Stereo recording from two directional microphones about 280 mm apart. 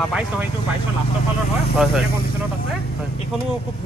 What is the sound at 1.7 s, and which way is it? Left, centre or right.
Speech, centre.